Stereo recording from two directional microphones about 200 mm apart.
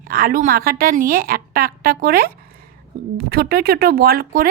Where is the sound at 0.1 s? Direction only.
45° right (ahead or behind).